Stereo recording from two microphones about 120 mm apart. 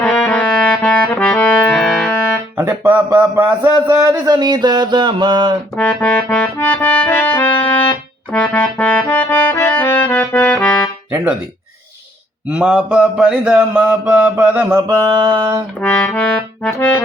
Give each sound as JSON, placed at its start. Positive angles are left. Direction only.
{"t": 0.0, "sound": "music", "side_deg": 10}
{"t": 2.6, "sound": "music", "side_deg": -15}
{"t": 3.2, "sound": "mantra", "side_deg": -15}
{"t": 3.7, "sound": "a sound", "side_deg": -40}
{"t": 3.9, "sound": "a sound", "side_deg": -30}
{"t": 5.7, "sound": "music", "side_deg": 10}
{"t": 8.3, "sound": "accordion", "side_deg": 10}
{"t": 12.5, "sound": "mantra", "side_deg": -10}
{"t": 15.0, "sound": "a sound", "side_deg": -35}
{"t": 15.8, "sound": "accordion", "side_deg": 10}